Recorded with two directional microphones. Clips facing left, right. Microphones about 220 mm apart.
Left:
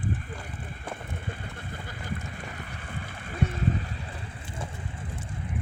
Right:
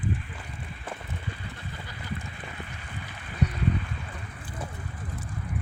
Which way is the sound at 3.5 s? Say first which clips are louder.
Right 1 dB; 40° left (ahead or behind).